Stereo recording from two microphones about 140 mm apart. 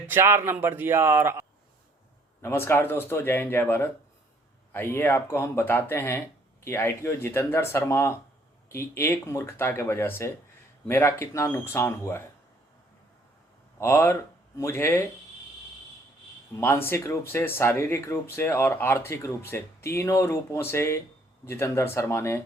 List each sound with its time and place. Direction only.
0.1 s speech: 15° right (ahead or behind)
2.4 s speech: 15° left (ahead or behind)
13.7 s speech: 15° left (ahead or behind)
16.6 s speech: 15° left (ahead or behind)